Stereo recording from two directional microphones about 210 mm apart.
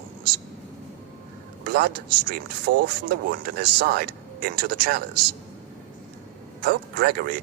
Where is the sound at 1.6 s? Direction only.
45° right (ahead or behind).